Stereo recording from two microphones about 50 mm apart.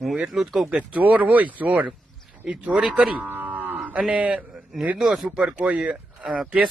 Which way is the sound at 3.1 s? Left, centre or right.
Right.